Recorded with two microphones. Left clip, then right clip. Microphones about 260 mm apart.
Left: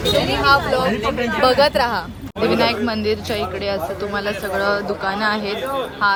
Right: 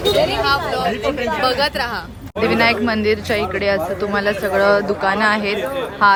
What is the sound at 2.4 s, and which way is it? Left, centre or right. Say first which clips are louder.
Speech: right 2 dB; centre.